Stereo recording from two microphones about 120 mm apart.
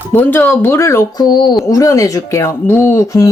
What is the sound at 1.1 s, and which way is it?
Speech, 40° left (ahead or behind).